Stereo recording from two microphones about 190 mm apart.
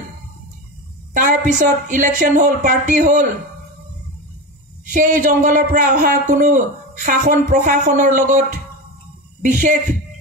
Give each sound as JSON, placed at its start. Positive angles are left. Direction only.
{"t": 1.1, "sound": "a woman's voice", "side_deg": -40}
{"t": 4.9, "sound": "a man's voice", "side_deg": -40}